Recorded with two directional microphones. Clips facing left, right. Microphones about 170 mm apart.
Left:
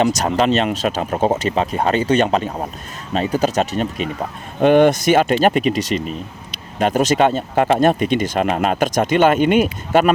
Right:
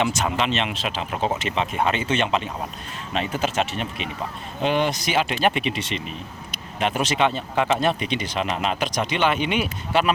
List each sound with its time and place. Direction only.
0.0 s speech: 40° left (ahead or behind)
4.6 s speech: 55° left (ahead or behind)